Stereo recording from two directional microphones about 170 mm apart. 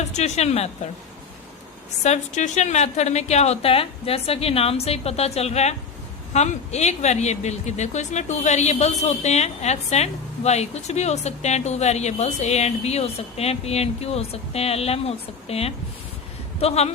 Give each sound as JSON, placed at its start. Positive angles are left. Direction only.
{"t": 0.1, "sound": "speech", "side_deg": 40}
{"t": 2.0, "sound": "speech", "side_deg": 45}